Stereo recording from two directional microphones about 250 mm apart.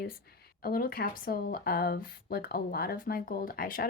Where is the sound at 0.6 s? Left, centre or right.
Left.